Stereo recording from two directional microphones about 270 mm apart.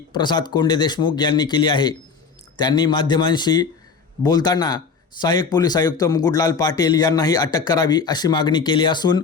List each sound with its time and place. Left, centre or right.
0.1 s speech: centre